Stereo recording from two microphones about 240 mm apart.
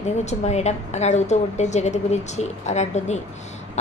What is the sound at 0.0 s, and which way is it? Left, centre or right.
A woman's voice, left.